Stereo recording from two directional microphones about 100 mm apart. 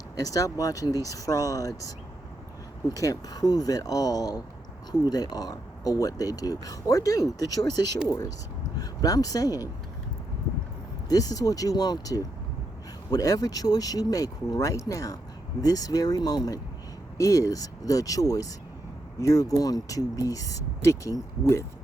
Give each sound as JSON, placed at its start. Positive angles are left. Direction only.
{"t": 0.2, "sound": "speech", "side_deg": 35}
{"t": 2.9, "sound": "speech", "side_deg": 35}
{"t": 11.1, "sound": "speech", "side_deg": 35}